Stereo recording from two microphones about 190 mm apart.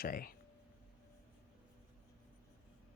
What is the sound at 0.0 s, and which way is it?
Speech, 50° left (ahead or behind).